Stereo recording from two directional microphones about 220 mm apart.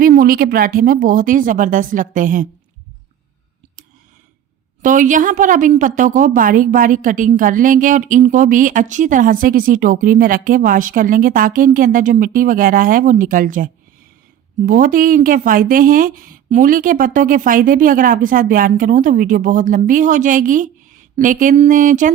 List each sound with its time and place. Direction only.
0.0 s a woman's voice: 40° right (ahead or behind)
4.8 s a woman's voice: 35° right (ahead or behind)
14.7 s a woman's voice: 40° right (ahead or behind)